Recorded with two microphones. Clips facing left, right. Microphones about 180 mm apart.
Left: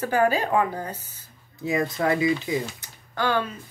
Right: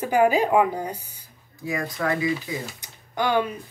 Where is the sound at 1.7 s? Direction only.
25° left (ahead or behind).